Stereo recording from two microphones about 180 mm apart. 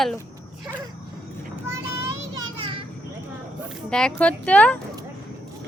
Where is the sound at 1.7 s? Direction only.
15° right (ahead or behind).